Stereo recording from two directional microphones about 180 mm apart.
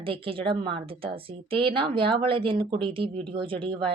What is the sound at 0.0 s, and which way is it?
A woman's voice, 30° right (ahead or behind).